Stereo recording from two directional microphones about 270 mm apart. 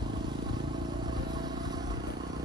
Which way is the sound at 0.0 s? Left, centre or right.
Centre.